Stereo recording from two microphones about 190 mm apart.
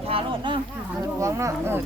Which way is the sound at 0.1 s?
25° right (ahead or behind).